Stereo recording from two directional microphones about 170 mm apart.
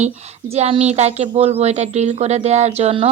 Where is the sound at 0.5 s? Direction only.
40° right (ahead or behind).